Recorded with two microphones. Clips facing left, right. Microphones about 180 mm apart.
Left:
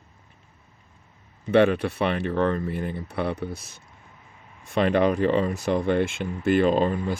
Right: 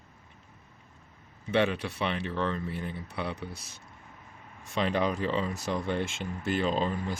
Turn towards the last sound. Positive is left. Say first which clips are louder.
# left 7 dB
turn(degrees=55)  # may be behind; listen again after turning